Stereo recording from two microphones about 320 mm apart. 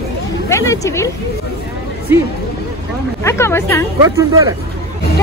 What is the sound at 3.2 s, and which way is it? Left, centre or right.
Speech, centre.